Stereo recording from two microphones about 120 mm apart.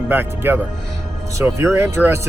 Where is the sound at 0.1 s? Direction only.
15° right (ahead or behind).